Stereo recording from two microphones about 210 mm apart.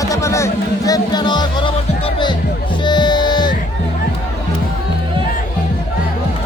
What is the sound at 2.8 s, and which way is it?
Music, 20° left (ahead or behind).